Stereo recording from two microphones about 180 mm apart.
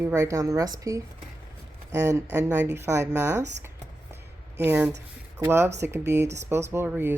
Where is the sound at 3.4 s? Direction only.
40° right (ahead or behind).